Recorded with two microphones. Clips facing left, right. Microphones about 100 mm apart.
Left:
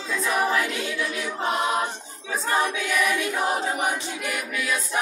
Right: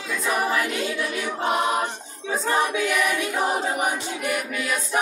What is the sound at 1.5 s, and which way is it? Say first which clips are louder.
Choir: right 1 dB; 5° right (ahead or behind).